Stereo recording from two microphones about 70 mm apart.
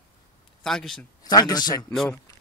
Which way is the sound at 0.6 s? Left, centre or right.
Centre.